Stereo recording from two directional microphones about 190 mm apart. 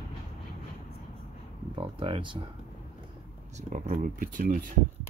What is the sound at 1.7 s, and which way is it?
Speech, 30° right (ahead or behind).